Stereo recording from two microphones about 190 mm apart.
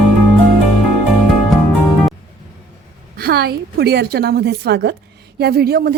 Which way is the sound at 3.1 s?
55° right (ahead or behind).